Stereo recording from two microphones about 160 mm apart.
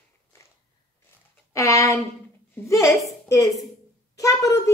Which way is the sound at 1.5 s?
20° left (ahead or behind).